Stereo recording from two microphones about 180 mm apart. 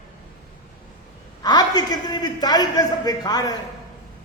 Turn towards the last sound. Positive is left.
turn(degrees=20)  # may be behind; listen again after turning